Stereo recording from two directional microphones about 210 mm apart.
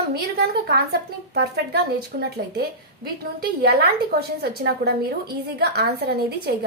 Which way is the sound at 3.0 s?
50° right (ahead or behind).